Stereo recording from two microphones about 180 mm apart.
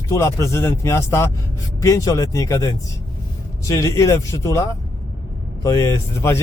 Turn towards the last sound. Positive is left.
turn(degrees=15)  # may be behind; listen again after turning